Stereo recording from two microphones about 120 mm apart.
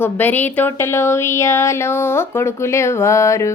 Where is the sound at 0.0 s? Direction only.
15° left (ahead or behind).